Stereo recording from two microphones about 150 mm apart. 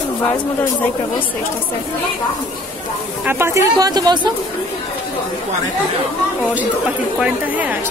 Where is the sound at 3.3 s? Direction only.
15° right (ahead or behind).